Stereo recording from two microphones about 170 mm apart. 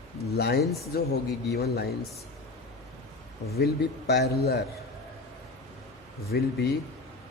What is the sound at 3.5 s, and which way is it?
A man's voice, 70° left (ahead or behind).